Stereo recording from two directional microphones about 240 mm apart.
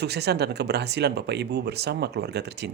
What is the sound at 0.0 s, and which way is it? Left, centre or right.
Speech, right.